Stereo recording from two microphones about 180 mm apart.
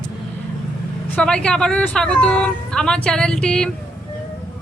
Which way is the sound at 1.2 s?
5° left (ahead or behind).